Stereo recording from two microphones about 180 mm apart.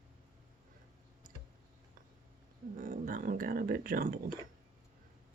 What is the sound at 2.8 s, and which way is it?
Speech, 50° right (ahead or behind).